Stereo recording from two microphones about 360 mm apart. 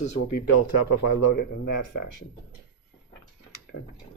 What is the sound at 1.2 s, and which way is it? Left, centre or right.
Speech, left.